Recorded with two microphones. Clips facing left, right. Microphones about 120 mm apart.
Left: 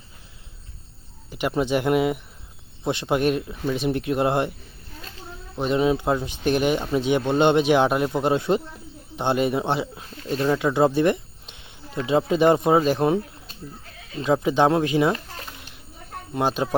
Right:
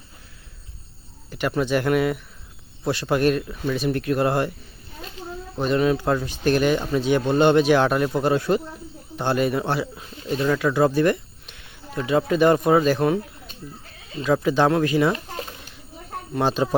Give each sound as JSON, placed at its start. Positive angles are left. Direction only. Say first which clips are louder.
{"t": 1.3, "sound": "speech", "louder": "even", "side_deg": 20}
{"t": 5.5, "sound": "speech", "louder": "even", "side_deg": 20}
{"t": 14.2, "sound": "speech", "louder": "even", "side_deg": 20}
{"t": 16.3, "sound": "speech", "louder": "right 2 dB", "side_deg": 15}